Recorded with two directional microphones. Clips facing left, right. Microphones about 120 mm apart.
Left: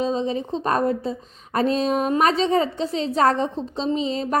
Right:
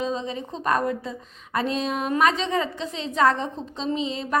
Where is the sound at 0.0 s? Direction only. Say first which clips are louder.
Left 5 dB; 35° left (ahead or behind).